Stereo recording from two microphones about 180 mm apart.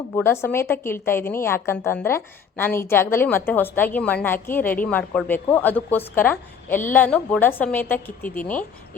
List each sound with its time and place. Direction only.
0.1 s a woman's voice: 15° left (ahead or behind)